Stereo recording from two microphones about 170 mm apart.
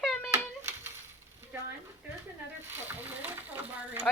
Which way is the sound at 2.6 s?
10° right (ahead or behind).